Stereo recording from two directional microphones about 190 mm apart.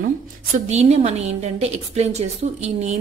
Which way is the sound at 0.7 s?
35° right (ahead or behind).